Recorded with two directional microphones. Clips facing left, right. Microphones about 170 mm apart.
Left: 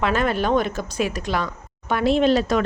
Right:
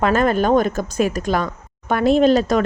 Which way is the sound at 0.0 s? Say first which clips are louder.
Right 5 dB; 45° right (ahead or behind).